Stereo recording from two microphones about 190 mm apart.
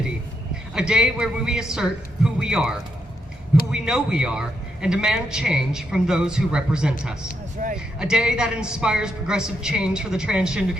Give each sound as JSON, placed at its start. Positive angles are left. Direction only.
{"t": 0.7, "sound": "a man's voice", "side_deg": -5}
{"t": 7.6, "sound": "speech", "side_deg": -45}
{"t": 7.9, "sound": "a man's voice", "side_deg": -5}